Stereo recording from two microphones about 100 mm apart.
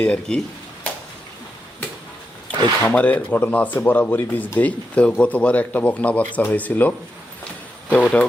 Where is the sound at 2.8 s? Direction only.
15° left (ahead or behind).